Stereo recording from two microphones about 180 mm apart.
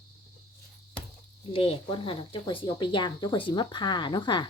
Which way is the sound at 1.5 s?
30° left (ahead or behind).